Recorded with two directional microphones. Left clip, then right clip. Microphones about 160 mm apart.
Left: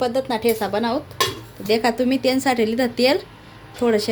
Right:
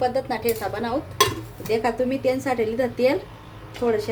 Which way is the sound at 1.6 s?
70° left (ahead or behind).